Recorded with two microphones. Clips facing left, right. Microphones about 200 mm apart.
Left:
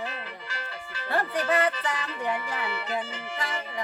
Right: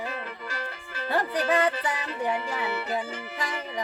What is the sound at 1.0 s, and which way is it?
Speech, 15° right (ahead or behind).